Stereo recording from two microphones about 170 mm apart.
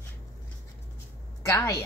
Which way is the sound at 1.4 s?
20° left (ahead or behind).